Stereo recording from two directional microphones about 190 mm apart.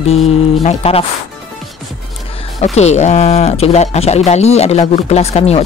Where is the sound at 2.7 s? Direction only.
35° left (ahead or behind).